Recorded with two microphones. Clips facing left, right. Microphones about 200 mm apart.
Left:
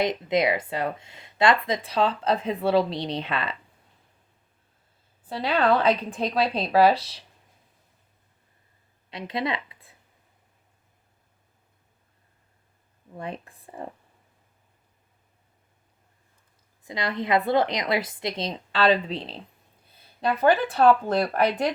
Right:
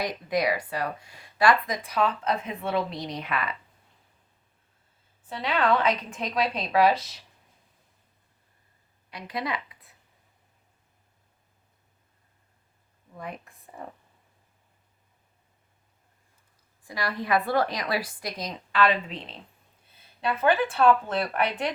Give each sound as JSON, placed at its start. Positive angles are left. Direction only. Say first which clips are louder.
{"t": 0.0, "sound": "speech", "louder": "left 4 dB", "side_deg": 20}
{"t": 5.3, "sound": "a woman's voice", "louder": "left 3 dB", "side_deg": 35}
{"t": 9.0, "sound": "a sound", "louder": "left 4 dB", "side_deg": 25}
{"t": 13.1, "sound": "speech", "louder": "left 4 dB", "side_deg": 30}
{"t": 16.8, "sound": "a woman's voice", "louder": "left 3 dB", "side_deg": 20}